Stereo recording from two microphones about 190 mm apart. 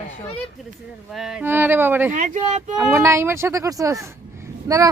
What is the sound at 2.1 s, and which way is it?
Speech, 40° right (ahead or behind).